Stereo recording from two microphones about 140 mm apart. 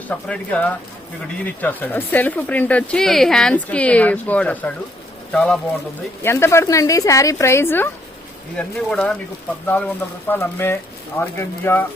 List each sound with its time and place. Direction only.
0.1 s speech: 10° left (ahead or behind)
6.2 s speech: 20° left (ahead or behind)
8.5 s speech: 5° left (ahead or behind)